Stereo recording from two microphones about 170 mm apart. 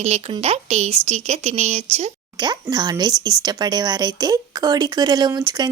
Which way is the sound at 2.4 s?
25° right (ahead or behind).